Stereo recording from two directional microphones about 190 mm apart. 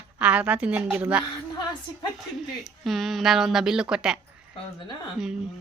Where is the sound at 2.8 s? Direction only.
Centre (ahead or behind).